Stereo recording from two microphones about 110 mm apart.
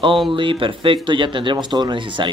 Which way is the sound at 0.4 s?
50° right (ahead or behind).